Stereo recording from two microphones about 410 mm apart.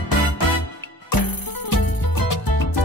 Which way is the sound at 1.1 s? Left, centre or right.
Left.